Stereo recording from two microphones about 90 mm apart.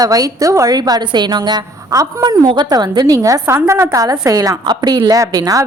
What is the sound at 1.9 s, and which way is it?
A woman's voice, 40° right (ahead or behind).